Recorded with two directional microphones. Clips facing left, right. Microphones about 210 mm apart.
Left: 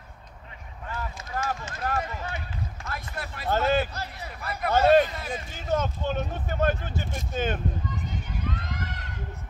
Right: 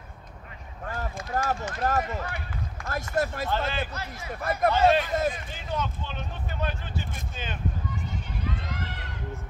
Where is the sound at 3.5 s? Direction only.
45° left (ahead or behind).